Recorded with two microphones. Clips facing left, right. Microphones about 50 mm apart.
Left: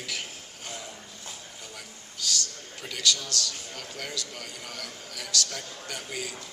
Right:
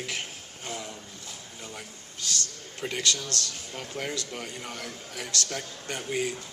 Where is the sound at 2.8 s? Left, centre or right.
Right.